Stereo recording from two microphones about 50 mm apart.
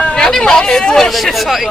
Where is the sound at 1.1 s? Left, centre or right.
Centre.